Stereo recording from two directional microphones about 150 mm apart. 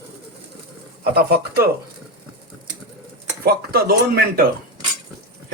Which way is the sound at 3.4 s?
90° right.